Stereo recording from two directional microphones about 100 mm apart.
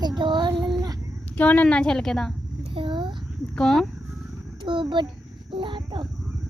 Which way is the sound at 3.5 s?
5° left (ahead or behind).